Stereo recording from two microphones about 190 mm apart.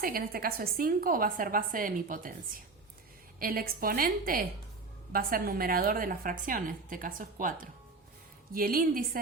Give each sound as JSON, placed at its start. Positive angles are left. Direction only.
{"t": 0.0, "sound": "a woman's voice", "side_deg": -50}
{"t": 3.3, "sound": "a woman's voice", "side_deg": -50}